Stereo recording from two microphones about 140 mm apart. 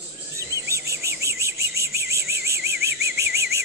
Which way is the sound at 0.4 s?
20° right (ahead or behind).